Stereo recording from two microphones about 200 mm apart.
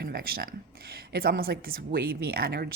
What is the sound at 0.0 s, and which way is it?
A woman's voice, 50° right (ahead or behind).